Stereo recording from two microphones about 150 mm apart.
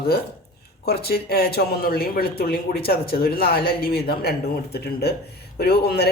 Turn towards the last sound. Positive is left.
turn(degrees=90)